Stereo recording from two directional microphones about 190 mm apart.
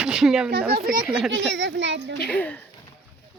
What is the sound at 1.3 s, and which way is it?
Speech, 70° right (ahead or behind).